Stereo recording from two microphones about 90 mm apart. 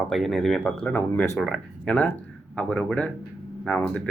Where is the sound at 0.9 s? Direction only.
20° left (ahead or behind).